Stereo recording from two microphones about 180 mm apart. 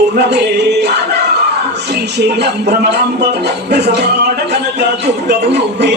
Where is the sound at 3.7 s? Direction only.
65° right (ahead or behind).